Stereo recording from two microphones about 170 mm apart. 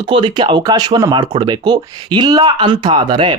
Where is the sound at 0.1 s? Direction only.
30° right (ahead or behind).